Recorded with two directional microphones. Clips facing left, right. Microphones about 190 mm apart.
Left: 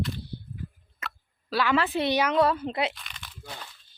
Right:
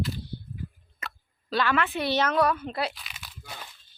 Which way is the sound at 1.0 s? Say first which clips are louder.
Left 1 dB; centre (ahead or behind).